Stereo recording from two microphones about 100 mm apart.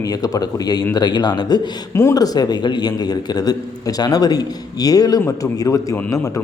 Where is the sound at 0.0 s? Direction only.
40° left (ahead or behind).